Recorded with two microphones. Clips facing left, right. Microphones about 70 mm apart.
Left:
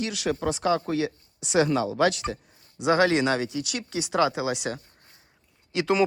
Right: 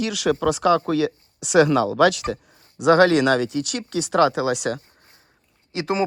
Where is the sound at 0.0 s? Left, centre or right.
Right.